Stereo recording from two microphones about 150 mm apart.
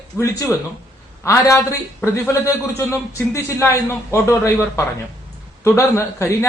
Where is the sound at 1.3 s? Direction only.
20° left (ahead or behind).